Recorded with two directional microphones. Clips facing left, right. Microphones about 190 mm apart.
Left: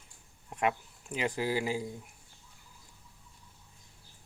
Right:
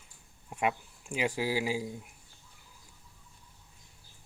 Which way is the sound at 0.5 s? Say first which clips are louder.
Even; 10° right (ahead or behind).